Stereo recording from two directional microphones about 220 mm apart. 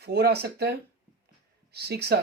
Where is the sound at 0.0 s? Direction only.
45° right (ahead or behind).